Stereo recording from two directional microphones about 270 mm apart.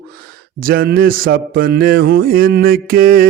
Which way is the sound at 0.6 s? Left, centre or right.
Right.